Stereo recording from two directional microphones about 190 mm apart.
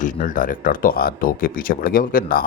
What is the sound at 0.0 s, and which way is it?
Speech, 45° left (ahead or behind).